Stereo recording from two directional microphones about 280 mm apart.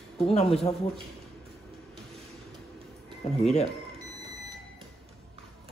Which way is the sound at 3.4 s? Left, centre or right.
Left.